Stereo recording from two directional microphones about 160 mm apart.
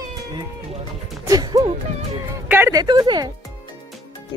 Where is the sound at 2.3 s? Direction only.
15° right (ahead or behind).